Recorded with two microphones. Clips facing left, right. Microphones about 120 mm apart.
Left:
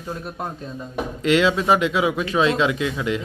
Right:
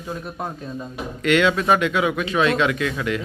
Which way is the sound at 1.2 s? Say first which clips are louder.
Even; 25° left (ahead or behind).